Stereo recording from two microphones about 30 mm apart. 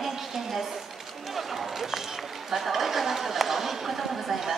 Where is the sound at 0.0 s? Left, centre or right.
Centre.